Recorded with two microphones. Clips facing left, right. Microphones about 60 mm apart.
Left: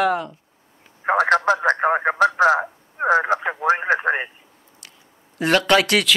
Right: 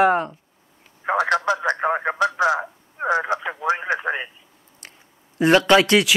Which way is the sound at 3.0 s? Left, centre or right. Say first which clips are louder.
Left 4 dB; left.